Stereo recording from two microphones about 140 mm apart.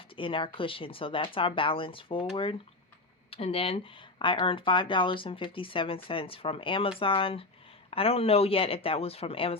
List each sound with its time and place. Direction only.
0.2 s speech: 35° left (ahead or behind)